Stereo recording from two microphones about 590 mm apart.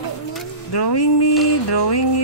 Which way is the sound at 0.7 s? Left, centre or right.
Left.